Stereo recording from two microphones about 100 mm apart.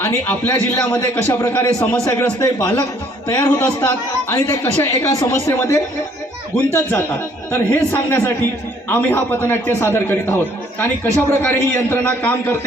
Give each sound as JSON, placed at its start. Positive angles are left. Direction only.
{"t": 0.0, "sound": "a man's voice", "side_deg": 25}
{"t": 3.2, "sound": "a man's voice", "side_deg": 25}